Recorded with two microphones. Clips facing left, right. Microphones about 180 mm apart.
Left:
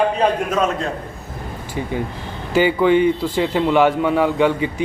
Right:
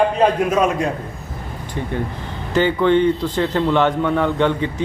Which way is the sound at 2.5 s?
10° left (ahead or behind).